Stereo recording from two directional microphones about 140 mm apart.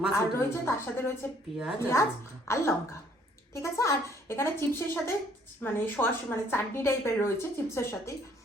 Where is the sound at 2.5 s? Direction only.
20° left (ahead or behind).